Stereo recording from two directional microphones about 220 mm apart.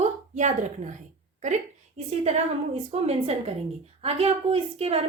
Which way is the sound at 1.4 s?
30° right (ahead or behind).